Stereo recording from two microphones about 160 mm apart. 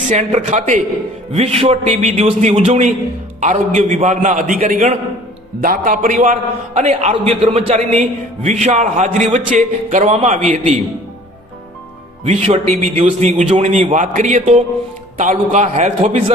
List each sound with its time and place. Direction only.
0.1 s a man's voice: 45° right (ahead or behind)
5.5 s a man's voice: 60° right (ahead or behind)
12.2 s a man's voice: 45° right (ahead or behind)